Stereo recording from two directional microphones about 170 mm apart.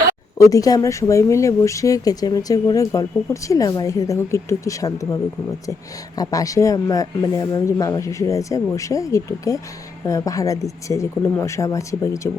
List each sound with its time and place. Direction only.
0.5 s speech: 20° left (ahead or behind)
6.1 s speech: 20° left (ahead or behind)